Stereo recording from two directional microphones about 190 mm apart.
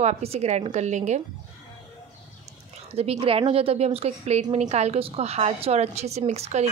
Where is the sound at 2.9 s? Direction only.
30° right (ahead or behind).